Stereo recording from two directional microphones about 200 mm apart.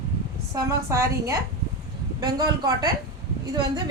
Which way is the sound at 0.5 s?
15° right (ahead or behind).